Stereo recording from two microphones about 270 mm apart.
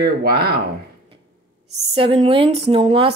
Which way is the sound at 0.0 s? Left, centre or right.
Right.